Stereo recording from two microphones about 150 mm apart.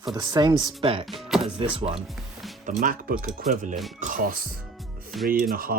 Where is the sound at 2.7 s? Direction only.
65° right (ahead or behind).